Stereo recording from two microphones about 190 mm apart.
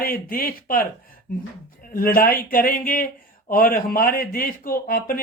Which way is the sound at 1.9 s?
50° left (ahead or behind).